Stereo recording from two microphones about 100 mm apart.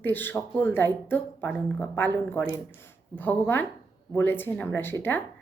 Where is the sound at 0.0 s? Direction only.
20° left (ahead or behind).